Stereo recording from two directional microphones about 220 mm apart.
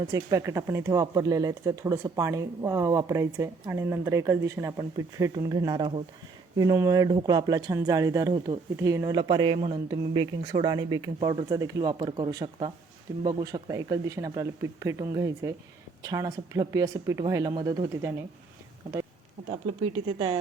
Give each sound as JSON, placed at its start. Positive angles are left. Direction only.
{"t": 0.1, "sound": "speech", "side_deg": -15}
{"t": 20.1, "sound": "a woman's voice", "side_deg": -20}